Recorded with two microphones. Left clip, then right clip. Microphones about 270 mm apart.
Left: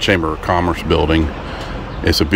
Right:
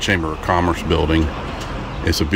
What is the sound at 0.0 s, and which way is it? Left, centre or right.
Speech, centre.